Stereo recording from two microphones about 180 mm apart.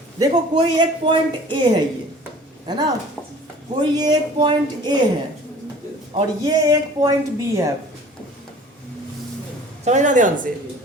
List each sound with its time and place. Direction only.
0.2 s a man's voice: 25° right (ahead or behind)
6.1 s a man's voice: 20° right (ahead or behind)
9.8 s speech: 40° right (ahead or behind)